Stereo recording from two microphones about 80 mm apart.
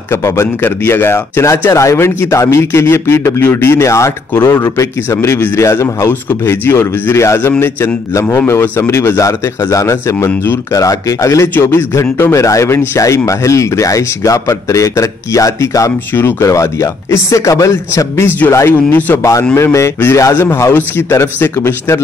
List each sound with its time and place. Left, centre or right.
0.1 s speech: left
10.2 s speech: left
10.7 s speech: left
16.1 s speech: left
18.9 s speech: left
19.5 s speech: left